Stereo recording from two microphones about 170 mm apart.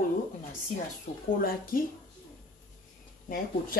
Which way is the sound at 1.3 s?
55° left (ahead or behind).